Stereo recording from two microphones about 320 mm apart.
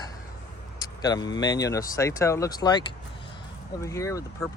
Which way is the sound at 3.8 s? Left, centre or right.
Centre.